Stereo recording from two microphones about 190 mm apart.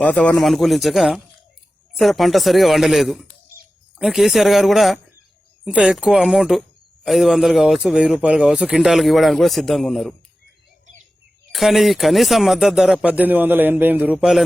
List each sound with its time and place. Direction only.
0.0 s speech: 5° left (ahead or behind)
11.5 s speech: centre (ahead or behind)